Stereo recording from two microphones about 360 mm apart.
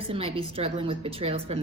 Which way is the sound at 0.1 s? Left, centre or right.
Centre.